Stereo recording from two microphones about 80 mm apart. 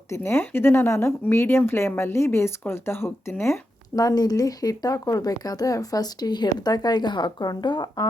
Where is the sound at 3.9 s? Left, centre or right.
Left.